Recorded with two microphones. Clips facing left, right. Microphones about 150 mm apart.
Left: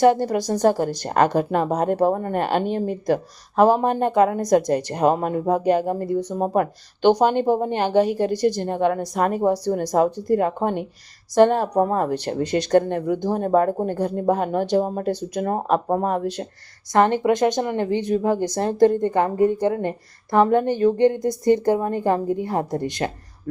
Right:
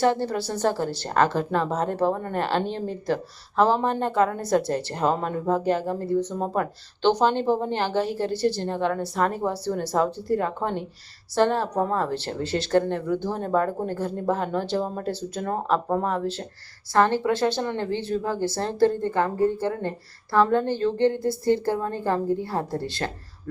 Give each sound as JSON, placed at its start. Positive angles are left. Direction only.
{"t": 0.0, "sound": "speech", "side_deg": 15}